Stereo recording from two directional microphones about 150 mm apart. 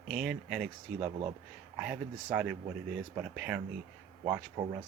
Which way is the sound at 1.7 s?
5° right (ahead or behind).